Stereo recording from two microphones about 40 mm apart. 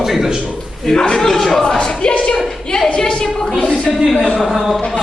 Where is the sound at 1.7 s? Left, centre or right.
Left.